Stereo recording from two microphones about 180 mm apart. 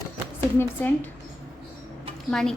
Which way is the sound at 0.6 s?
10° left (ahead or behind).